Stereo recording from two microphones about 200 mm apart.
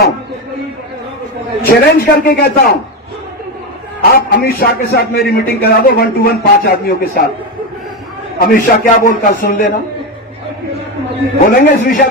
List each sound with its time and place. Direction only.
1.6 s a man's voice: 50° left (ahead or behind)
4.0 s a man's voice: 50° left (ahead or behind)
8.4 s a man's voice: 45° left (ahead or behind)
11.5 s a man's voice: 45° left (ahead or behind)